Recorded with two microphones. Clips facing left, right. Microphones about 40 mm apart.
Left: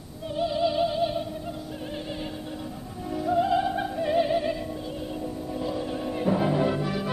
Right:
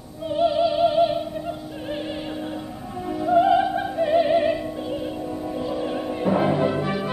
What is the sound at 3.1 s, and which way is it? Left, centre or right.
Music, centre.